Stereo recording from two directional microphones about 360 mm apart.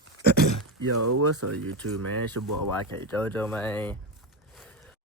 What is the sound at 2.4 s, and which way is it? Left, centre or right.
Speech, right.